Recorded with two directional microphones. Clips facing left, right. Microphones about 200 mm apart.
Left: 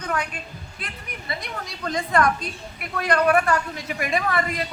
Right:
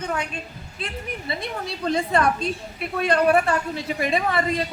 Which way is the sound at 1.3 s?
25° right (ahead or behind).